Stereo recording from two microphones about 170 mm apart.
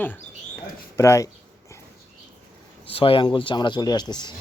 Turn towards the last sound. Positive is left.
turn(degrees=25)  # may be behind; listen again after turning